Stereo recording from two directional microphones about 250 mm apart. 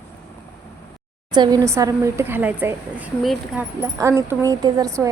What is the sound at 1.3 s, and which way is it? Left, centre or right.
A woman's voice, centre.